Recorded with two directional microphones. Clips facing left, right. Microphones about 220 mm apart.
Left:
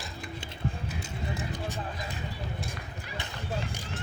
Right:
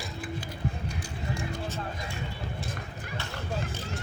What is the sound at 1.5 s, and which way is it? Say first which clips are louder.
Music: right 1 dB; 15° left (ahead or behind).